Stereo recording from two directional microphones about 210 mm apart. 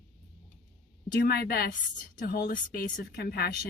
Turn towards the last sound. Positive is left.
turn(degrees=50)  # may be behind; listen again after turning